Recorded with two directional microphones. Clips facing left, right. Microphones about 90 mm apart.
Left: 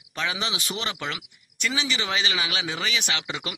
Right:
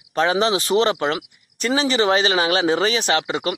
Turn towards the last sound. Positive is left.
turn(degrees=-40)  # may be behind; listen again after turning